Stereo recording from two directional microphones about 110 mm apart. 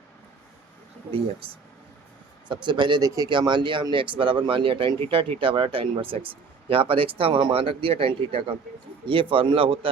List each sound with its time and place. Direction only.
1.4 s speech: 55° right (ahead or behind)
3.0 s speech: 30° right (ahead or behind)
3.2 s speech: 45° right (ahead or behind)